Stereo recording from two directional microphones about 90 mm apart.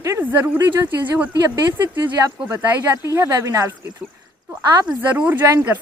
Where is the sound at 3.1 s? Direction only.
35° right (ahead or behind).